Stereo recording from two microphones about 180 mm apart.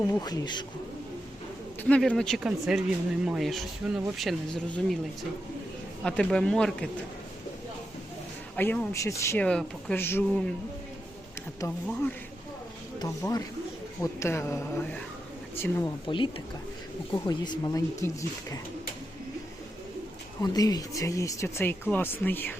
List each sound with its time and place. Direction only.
0.1 s speech: 20° left (ahead or behind)
1.8 s speech: 5° left (ahead or behind)
6.0 s speech: 5° left (ahead or behind)
8.5 s speech: 10° left (ahead or behind)
11.6 s speech: 15° left (ahead or behind)
13.0 s speech: 20° left (ahead or behind)
16.0 s speech: 25° left (ahead or behind)
20.4 s speech: 20° left (ahead or behind)